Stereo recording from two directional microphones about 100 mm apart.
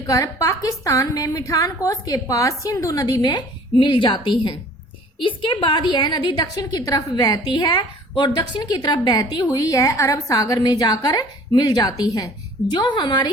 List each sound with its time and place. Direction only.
0.1 s a woman's voice: 35° left (ahead or behind); by 6.4 s 50° left (ahead or behind)
6.4 s a woman's voice: 40° left (ahead or behind)